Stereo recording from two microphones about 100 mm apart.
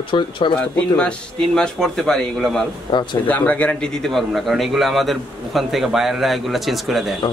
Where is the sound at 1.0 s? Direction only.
5° left (ahead or behind).